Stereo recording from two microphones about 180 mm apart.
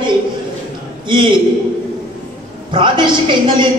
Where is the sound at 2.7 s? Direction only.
25° right (ahead or behind).